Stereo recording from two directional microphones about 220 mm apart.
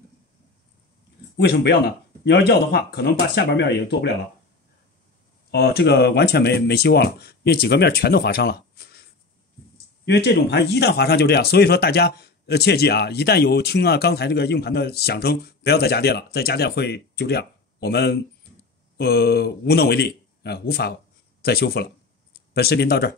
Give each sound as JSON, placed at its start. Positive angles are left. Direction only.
{"t": 1.3, "sound": "speech", "side_deg": 50}
{"t": 5.5, "sound": "speech", "side_deg": 50}
{"t": 10.0, "sound": "speech", "side_deg": 50}